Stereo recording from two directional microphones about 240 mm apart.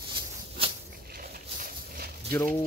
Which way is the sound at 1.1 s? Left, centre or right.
Right.